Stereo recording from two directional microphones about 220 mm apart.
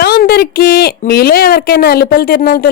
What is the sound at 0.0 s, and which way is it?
Speech, 45° left (ahead or behind).